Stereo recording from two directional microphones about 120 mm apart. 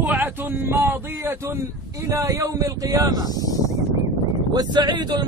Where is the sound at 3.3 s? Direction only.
30° left (ahead or behind).